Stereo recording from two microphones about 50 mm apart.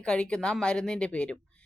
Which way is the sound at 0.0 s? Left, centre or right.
Centre.